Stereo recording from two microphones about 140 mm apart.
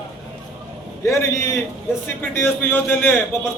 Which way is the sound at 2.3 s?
15° left (ahead or behind).